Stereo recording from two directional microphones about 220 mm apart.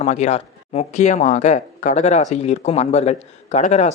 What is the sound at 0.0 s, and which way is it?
Speech, 30° left (ahead or behind).